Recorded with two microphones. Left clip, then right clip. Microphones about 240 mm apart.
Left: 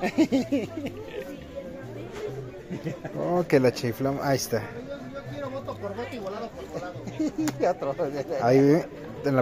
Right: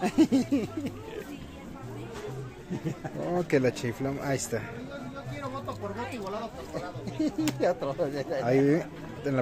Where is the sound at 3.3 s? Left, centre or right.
Centre.